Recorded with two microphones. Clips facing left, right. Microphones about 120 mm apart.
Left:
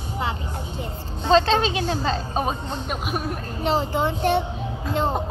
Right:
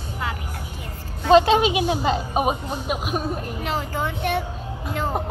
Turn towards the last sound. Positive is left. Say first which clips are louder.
# left 2 dB
turn(degrees=25)  # may be behind; listen again after turning